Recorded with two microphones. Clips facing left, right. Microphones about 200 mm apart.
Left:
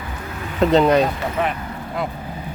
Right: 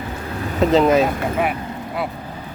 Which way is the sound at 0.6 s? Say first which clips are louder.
Even; centre (ahead or behind).